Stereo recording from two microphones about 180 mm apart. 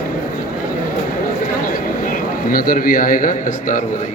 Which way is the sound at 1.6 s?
50° left (ahead or behind).